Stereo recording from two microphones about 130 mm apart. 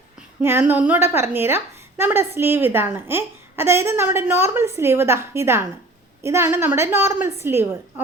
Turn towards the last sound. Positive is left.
turn(degrees=-20)  # may be behind; listen again after turning